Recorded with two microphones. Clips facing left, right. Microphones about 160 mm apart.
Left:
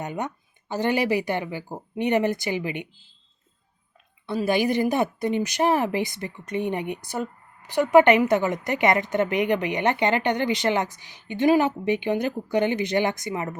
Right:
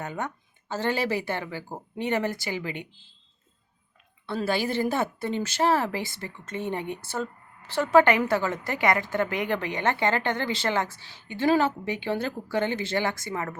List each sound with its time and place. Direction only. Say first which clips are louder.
0.0 s a woman's voice: left 3 dB; 20° left (ahead or behind)
4.3 s a woman's voice: left 4 dB; 15° left (ahead or behind)